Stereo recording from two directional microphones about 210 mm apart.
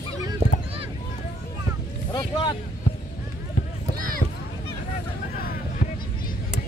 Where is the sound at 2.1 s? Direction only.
20° left (ahead or behind).